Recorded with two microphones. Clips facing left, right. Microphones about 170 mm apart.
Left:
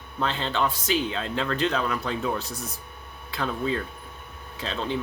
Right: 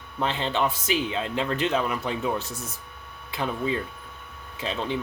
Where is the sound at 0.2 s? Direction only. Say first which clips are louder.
Right 1 dB; 15° right (ahead or behind).